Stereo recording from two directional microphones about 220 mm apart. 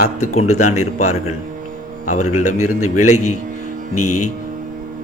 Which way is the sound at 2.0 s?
90° left.